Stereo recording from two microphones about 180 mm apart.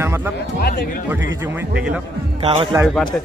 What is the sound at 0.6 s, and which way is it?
Speech, 60° left (ahead or behind).